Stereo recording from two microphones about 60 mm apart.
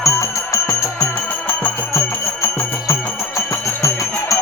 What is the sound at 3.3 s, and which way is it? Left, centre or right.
Music, left.